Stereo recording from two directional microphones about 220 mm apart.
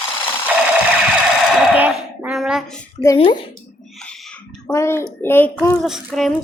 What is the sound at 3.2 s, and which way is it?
Speech, 25° left (ahead or behind).